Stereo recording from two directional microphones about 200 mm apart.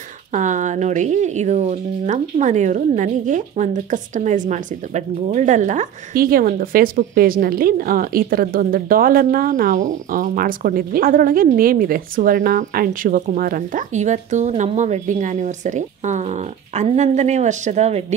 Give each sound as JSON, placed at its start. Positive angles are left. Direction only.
{"t": 0.3, "sound": "speech", "side_deg": -40}